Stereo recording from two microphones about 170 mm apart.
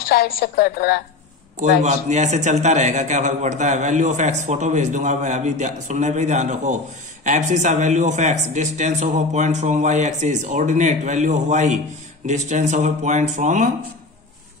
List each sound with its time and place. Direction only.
0.0 s a woman's voice: 60° left (ahead or behind)
1.6 s a man's voice: 45° right (ahead or behind)